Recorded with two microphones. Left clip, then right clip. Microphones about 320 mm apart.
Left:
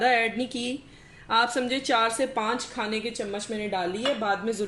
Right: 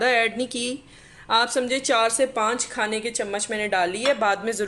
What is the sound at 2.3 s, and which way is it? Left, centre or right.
Speech, right.